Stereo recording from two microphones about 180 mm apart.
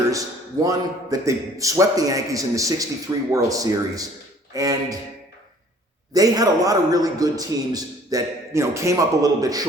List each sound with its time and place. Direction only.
0.1 s a man's voice: 20° right (ahead or behind)
6.1 s a man's voice: 20° right (ahead or behind)